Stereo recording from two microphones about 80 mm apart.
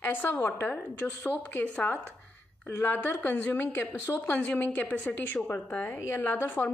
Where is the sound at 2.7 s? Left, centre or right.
Left.